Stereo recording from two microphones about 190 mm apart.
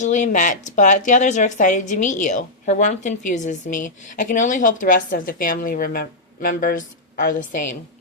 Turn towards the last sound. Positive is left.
turn(degrees=45)  # may be behind; listen again after turning